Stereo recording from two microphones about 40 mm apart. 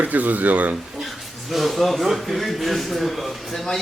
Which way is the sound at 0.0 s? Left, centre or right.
Right.